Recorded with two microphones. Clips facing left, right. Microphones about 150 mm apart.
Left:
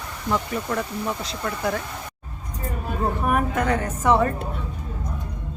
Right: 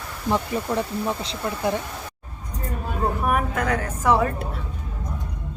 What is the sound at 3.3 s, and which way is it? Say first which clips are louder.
A woman's voice: left 3 dB; centre (ahead or behind).